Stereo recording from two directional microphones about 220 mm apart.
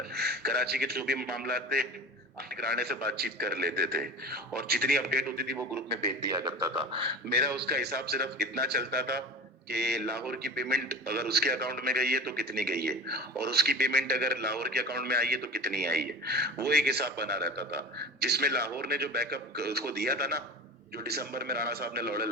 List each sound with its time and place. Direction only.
0.1 s a man's voice: 45° right (ahead or behind)
7.3 s a man's voice: 45° right (ahead or behind)